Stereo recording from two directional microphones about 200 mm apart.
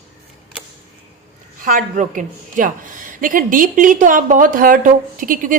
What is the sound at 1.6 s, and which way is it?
A woman's voice, 40° right (ahead or behind).